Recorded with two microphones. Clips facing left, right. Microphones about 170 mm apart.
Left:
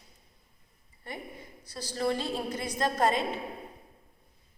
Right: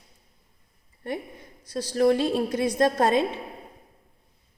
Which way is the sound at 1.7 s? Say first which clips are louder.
Right 9 dB; 65° right (ahead or behind).